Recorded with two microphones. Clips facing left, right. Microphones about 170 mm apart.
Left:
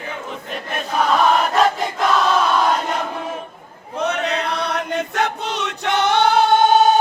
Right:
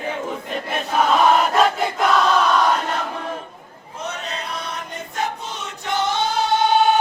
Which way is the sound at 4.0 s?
65° left (ahead or behind).